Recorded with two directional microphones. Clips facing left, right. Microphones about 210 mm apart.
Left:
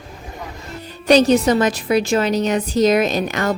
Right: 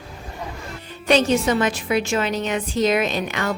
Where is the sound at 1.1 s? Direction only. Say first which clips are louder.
Left 5 dB; 40° left (ahead or behind).